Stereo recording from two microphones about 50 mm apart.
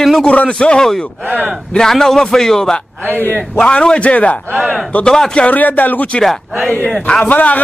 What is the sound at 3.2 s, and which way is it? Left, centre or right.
Speech, left.